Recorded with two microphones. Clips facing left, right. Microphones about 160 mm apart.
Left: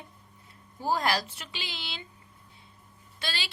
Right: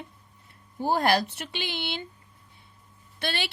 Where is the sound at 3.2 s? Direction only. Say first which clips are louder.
Right 6 dB; 60° right (ahead or behind).